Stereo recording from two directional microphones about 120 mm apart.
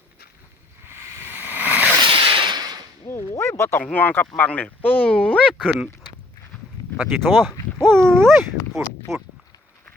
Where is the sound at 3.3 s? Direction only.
20° left (ahead or behind).